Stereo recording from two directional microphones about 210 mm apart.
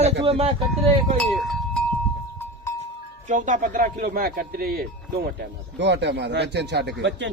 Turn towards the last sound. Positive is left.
turn(degrees=-55)  # may be behind; listen again after turning